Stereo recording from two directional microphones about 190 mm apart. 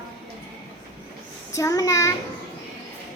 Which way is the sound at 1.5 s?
15° left (ahead or behind).